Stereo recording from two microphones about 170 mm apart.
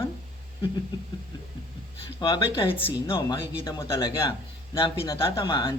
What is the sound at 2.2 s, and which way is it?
Speech, 30° left (ahead or behind).